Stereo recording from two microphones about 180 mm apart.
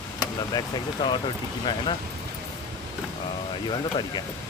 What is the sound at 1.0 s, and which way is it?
Speech, 25° left (ahead or behind).